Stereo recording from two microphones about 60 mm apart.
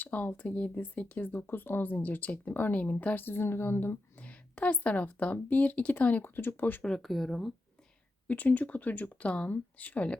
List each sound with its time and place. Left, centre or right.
0.0 s speech: left
1.3 s speech: left
3.2 s speech: left
4.2 s speech: left
6.8 s speech: centre
8.3 s speech: left